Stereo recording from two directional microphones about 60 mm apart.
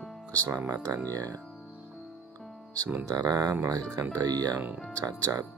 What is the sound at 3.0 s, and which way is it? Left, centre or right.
Speech, right.